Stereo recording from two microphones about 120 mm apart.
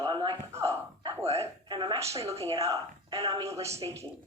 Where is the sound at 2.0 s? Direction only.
25° right (ahead or behind).